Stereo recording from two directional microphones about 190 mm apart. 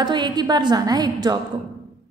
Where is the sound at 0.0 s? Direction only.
25° right (ahead or behind).